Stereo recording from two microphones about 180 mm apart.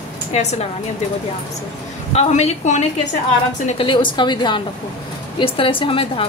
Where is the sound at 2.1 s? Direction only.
35° left (ahead or behind).